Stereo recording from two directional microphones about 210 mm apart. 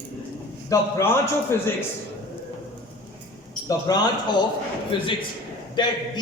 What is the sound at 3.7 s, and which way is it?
A man's voice, 20° left (ahead or behind).